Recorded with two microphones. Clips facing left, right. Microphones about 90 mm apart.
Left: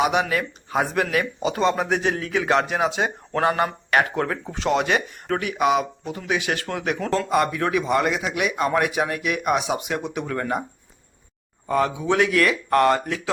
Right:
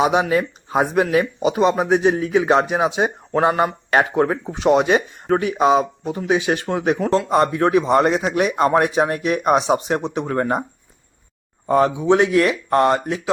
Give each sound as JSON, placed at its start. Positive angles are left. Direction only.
{"t": 0.0, "sound": "speech", "side_deg": -25}
{"t": 11.7, "sound": "speech", "side_deg": -30}